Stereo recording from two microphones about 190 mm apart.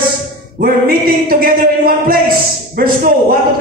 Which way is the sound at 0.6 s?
50° right (ahead or behind).